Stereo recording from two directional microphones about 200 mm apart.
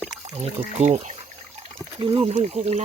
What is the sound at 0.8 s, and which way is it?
Speech, 35° right (ahead or behind).